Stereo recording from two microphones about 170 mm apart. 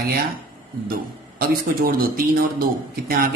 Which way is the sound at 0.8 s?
60° right (ahead or behind).